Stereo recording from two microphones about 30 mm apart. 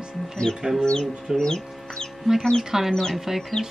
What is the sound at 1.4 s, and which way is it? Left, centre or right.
Chicken, left.